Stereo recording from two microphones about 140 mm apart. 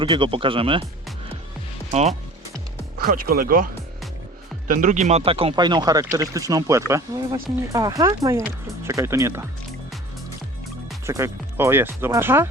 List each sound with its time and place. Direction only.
0.0 s speech: 35° right (ahead or behind)
1.9 s speech: 55° right (ahead or behind)
3.1 s speech: 90° right
4.7 s speech: 65° right (ahead or behind); by 9.5 s 20° right (ahead or behind)
11.0 s speech: 20° right (ahead or behind)